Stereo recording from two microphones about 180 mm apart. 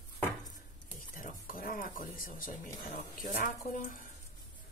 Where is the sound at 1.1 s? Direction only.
50° left (ahead or behind).